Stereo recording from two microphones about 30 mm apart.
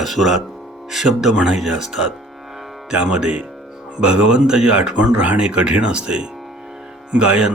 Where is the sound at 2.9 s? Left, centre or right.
Right.